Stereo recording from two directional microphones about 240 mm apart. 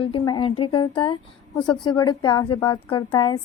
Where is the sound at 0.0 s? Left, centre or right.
Left.